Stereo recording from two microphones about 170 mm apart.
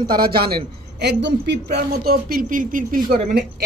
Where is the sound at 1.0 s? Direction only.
90° right; by 3.1 s 55° right (ahead or behind).